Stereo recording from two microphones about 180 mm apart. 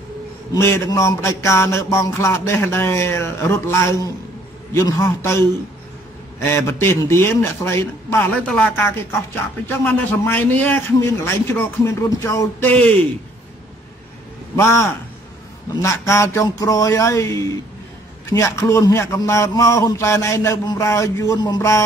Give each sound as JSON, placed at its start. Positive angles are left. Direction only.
{"t": 0.6, "sound": "a man's voice", "side_deg": 15}
{"t": 6.4, "sound": "a man's voice", "side_deg": 15}
{"t": 14.6, "sound": "a man's voice", "side_deg": 15}